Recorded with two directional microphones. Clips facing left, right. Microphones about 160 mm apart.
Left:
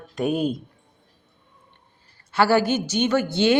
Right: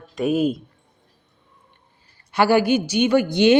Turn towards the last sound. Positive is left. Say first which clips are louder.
# right 4 dB
turn(degrees=-15)  # may be behind; listen again after turning